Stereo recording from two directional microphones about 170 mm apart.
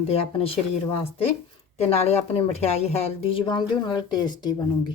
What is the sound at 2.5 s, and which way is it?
Speech, 40° left (ahead or behind).